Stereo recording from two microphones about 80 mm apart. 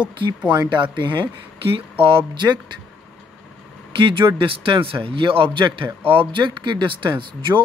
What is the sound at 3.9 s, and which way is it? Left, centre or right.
Speech, right.